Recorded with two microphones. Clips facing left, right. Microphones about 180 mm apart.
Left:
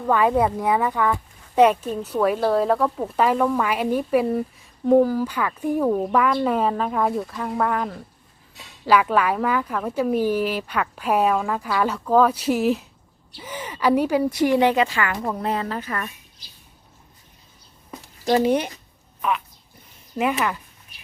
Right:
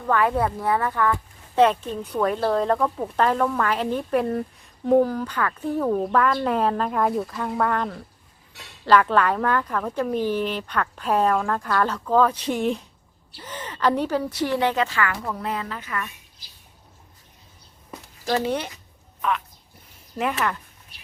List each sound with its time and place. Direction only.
0.0 s speech: 15° left (ahead or behind)
15.2 s speech: 30° left (ahead or behind)
18.3 s speech: 15° left (ahead or behind)
20.1 s speech: 5° left (ahead or behind)